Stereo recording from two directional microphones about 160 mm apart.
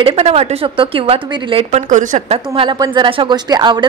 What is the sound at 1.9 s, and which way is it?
A woman's voice, 50° right (ahead or behind).